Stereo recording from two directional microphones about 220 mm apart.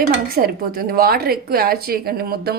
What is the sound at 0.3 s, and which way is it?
A woman's voice, 45° right (ahead or behind).